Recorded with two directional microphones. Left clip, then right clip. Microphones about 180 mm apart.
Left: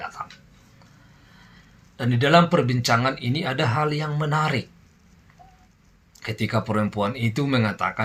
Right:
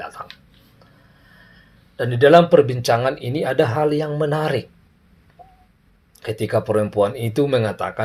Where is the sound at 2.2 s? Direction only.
45° right (ahead or behind).